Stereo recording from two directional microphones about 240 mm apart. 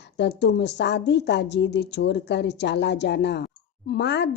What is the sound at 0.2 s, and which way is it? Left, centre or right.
A woman's voice, left.